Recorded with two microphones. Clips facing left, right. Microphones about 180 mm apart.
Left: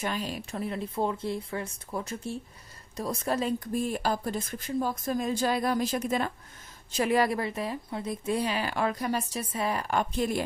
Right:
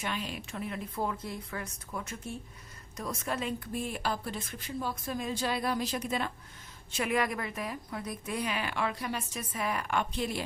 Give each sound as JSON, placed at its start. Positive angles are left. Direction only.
{"t": 0.0, "sound": "a woman's voice", "side_deg": 40}
{"t": 6.9, "sound": "a woman's voice", "side_deg": 35}